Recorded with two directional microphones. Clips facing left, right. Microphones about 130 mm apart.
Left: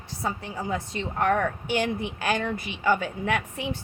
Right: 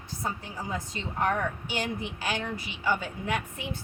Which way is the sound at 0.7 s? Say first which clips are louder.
Left 5 dB; 65° left (ahead or behind).